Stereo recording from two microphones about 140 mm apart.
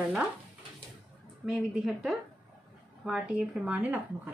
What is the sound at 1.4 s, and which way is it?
A woman's voice, 5° right (ahead or behind).